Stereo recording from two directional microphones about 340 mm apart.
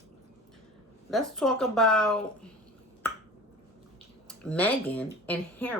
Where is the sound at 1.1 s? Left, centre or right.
Centre.